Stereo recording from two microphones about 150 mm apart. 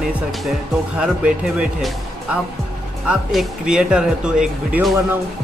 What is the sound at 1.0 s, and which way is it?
Speech, 5° right (ahead or behind).